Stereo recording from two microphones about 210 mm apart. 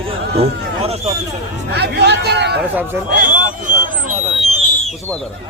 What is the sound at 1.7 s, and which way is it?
Speech, 55° right (ahead or behind).